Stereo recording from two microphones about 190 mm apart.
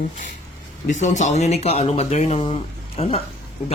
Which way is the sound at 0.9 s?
40° left (ahead or behind).